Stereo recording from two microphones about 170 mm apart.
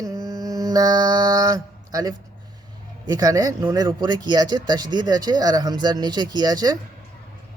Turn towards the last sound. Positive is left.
turn(degrees=-25)  # may be behind; listen again after turning